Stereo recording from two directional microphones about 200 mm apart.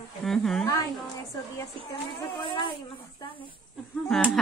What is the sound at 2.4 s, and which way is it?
Speech, 25° left (ahead or behind).